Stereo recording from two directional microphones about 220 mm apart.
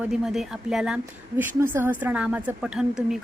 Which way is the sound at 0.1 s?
Centre (ahead or behind).